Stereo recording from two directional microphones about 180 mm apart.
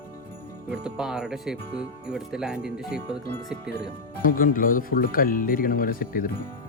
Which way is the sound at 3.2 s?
75° right (ahead or behind).